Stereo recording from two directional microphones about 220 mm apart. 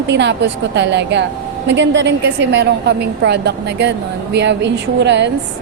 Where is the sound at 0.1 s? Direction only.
50° right (ahead or behind).